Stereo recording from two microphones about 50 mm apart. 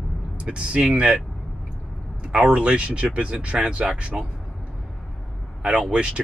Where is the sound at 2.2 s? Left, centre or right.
Right.